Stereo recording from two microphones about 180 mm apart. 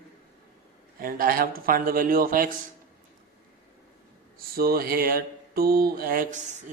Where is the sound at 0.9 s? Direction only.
55° right (ahead or behind).